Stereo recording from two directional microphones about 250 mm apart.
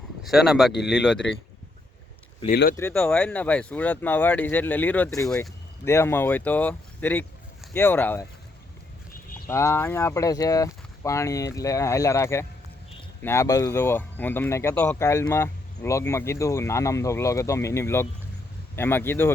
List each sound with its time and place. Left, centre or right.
0.3 s speech: centre
0.7 s speech: left
2.5 s speech: left
2.7 s speech: centre
9.5 s speech: centre